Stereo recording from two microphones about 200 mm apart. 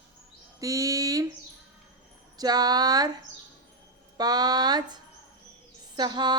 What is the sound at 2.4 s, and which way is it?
Speech, 20° right (ahead or behind).